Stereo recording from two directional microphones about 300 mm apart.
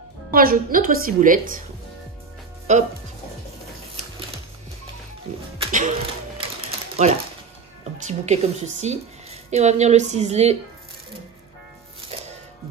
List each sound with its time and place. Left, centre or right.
0.3 s a woman's voice: right
2.7 s a woman's voice: right
5.3 s music: right
8.1 s a woman's voice: right